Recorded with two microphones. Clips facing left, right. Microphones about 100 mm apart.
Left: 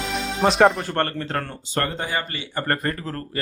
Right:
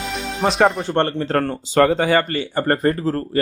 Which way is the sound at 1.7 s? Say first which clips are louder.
Right 10 dB; 90° right.